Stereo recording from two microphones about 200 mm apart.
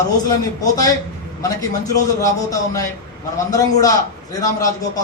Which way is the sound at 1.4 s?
15° left (ahead or behind).